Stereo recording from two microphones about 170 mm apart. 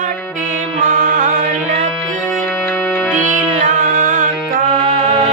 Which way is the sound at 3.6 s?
50° right (ahead or behind).